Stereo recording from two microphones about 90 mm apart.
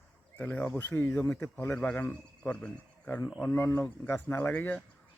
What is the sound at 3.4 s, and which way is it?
Speech, 30° left (ahead or behind).